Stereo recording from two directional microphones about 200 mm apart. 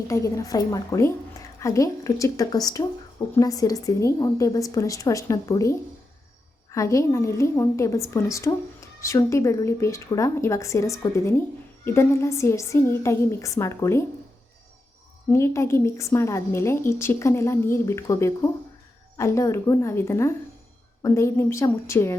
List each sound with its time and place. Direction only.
0.1 s a woman's voice: 15° left (ahead or behind)
6.7 s a woman's voice: 15° left (ahead or behind)
15.3 s a woman's voice: 15° left (ahead or behind)